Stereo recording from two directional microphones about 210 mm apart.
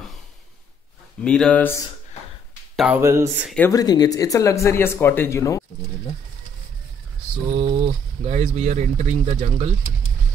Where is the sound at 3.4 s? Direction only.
5° left (ahead or behind).